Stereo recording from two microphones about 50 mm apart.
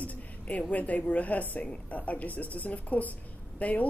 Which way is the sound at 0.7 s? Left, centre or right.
Left.